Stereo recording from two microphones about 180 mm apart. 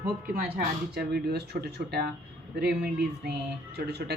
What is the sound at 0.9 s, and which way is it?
Speech, 65° right (ahead or behind).